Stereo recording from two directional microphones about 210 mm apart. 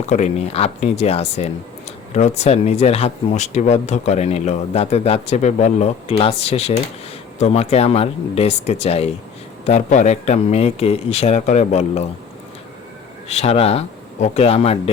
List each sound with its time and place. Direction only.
0.1 s speech: 30° left (ahead or behind)
13.3 s speech: 30° left (ahead or behind)